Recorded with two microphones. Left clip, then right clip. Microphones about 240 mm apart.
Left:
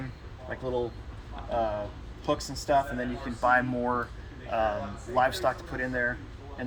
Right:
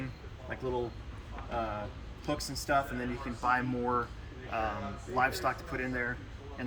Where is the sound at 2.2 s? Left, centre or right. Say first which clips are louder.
Left 6 dB; centre.